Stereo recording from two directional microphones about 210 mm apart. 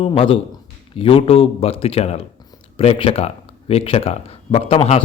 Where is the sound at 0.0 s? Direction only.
25° left (ahead or behind).